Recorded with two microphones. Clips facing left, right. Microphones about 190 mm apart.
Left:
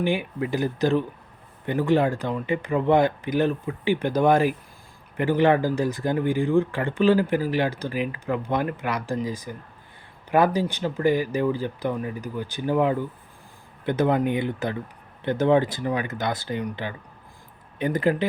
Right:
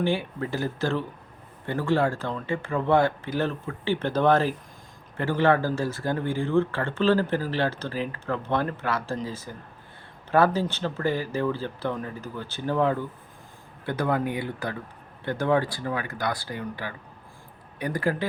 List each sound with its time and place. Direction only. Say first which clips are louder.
0.0 s speech: left 2 dB; 15° left (ahead or behind)